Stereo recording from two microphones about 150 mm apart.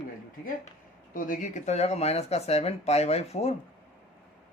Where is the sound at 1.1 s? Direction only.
65° left (ahead or behind); by 3.5 s 45° left (ahead or behind).